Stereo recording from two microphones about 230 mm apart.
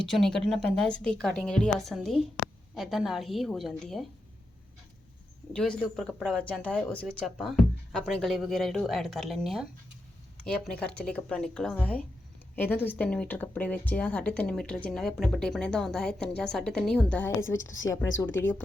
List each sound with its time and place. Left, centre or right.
0.0 s speech: centre
5.5 s a woman's voice: centre